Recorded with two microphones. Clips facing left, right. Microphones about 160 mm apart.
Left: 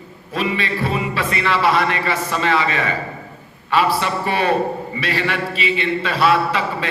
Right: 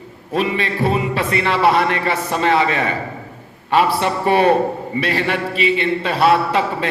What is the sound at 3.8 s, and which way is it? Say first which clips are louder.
A man's voice: right 2 dB; 50° right (ahead or behind).